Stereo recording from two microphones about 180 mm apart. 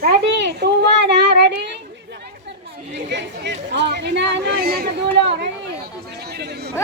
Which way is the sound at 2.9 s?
75° right (ahead or behind).